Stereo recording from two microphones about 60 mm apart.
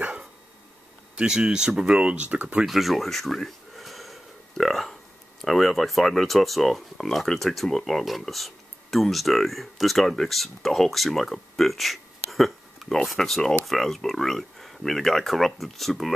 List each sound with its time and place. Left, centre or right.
1.1 s speech: centre
2.6 s a sound: centre
5.4 s speech: centre